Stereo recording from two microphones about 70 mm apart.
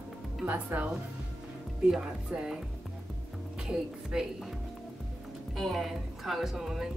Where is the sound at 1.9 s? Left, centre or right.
Centre.